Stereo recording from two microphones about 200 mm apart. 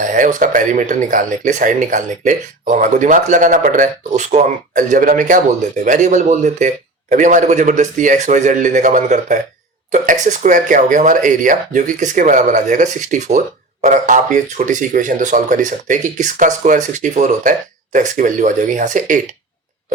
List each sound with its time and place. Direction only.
0.0 s speech: 40° right (ahead or behind)